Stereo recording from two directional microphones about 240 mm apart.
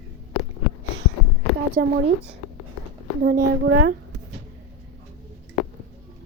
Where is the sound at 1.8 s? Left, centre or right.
Right.